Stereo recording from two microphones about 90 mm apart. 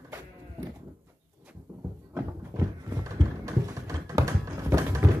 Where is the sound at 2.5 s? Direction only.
35° right (ahead or behind).